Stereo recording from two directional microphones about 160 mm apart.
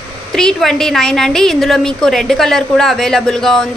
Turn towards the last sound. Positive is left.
turn(degrees=0)  # may be behind; listen again after turning